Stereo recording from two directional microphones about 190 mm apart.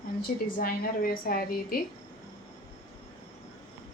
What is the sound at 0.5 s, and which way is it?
A woman's voice, 50° left (ahead or behind).